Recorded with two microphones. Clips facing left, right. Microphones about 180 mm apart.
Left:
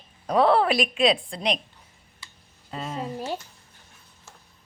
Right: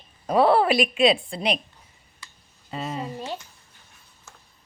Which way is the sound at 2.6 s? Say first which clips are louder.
Right 1 dB; 5° right (ahead or behind).